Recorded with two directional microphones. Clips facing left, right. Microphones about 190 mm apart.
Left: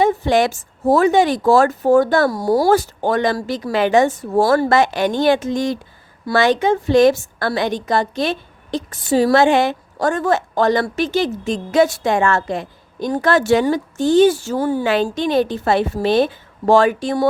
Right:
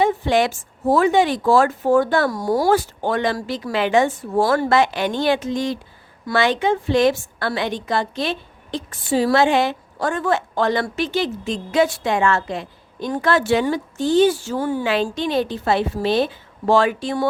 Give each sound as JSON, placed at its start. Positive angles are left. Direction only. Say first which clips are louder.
{"t": 0.0, "sound": "a woman's voice", "louder": "left 2 dB", "side_deg": 45}